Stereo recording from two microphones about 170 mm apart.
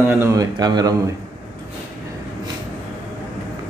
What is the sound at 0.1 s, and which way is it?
Speech, 15° right (ahead or behind).